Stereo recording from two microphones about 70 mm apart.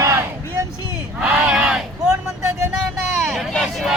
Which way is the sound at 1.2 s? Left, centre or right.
Right.